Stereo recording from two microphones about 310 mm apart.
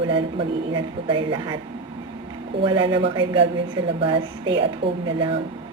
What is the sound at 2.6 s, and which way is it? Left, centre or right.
Speech, centre.